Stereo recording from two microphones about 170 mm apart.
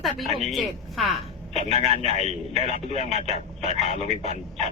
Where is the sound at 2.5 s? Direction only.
Centre (ahead or behind).